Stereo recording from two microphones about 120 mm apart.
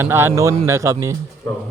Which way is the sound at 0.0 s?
20° right (ahead or behind).